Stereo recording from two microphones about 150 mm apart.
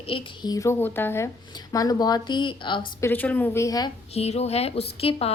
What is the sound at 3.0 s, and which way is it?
Speech, 15° left (ahead or behind).